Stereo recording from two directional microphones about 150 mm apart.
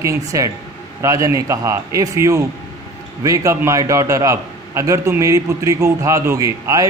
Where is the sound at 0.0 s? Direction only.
20° right (ahead or behind).